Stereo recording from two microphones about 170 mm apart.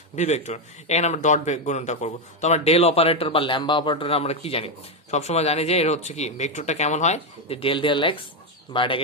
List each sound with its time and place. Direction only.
0.1 s speech: 45° left (ahead or behind)